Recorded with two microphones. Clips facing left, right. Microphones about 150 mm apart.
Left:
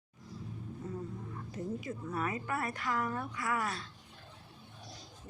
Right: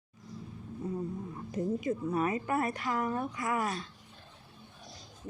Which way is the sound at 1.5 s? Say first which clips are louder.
Right 8 dB; 25° right (ahead or behind).